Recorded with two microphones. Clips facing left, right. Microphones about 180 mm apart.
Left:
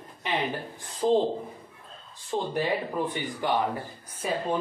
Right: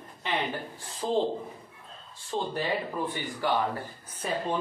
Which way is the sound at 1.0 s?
20° left (ahead or behind).